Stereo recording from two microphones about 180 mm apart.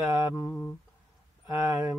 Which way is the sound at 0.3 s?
20° left (ahead or behind).